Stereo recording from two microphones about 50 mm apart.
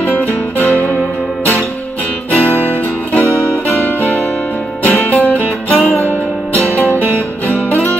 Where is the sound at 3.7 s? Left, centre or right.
Left.